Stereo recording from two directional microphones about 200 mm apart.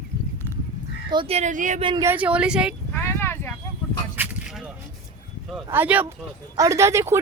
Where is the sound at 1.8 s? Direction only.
25° right (ahead or behind).